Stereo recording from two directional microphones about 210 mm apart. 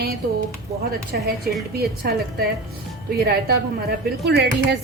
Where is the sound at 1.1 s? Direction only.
45° right (ahead or behind).